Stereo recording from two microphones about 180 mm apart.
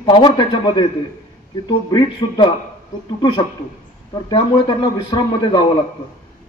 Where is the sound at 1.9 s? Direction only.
25° left (ahead or behind).